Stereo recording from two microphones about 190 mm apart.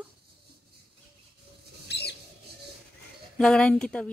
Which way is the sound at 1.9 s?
60° left (ahead or behind).